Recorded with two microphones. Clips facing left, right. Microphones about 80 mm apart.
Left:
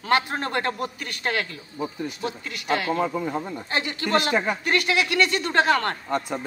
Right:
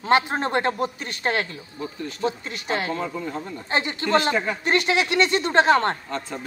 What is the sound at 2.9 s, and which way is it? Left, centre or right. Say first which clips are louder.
Speech: left 4 dB; centre.